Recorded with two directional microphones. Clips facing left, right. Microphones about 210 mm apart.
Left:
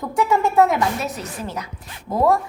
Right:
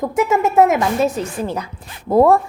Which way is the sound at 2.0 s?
55° right (ahead or behind).